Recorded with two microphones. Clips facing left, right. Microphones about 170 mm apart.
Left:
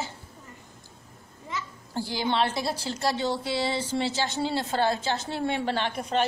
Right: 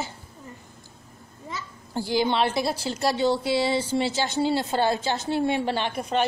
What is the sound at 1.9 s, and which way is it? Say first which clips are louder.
A woman's voice: right 4 dB; 15° right (ahead or behind).